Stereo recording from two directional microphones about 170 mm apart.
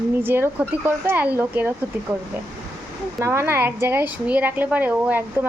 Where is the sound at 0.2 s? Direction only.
15° right (ahead or behind).